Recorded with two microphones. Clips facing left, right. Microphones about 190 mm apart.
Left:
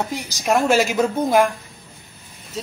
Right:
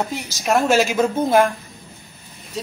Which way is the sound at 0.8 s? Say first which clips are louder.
Right 1 dB; centre (ahead or behind).